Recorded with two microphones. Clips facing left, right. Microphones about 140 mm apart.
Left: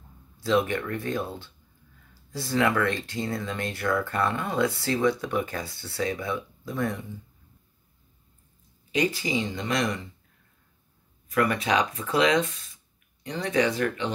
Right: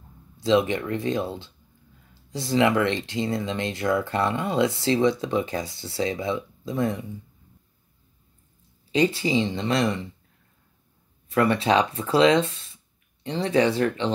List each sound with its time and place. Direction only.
0.4 s speech: 20° right (ahead or behind)
8.9 s speech: 30° right (ahead or behind)
11.2 s speech: 30° right (ahead or behind)